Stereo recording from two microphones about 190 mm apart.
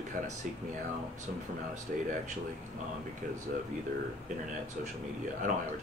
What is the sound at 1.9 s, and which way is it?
Speech, 45° right (ahead or behind).